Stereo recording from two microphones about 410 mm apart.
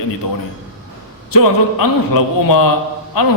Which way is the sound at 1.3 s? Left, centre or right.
Left.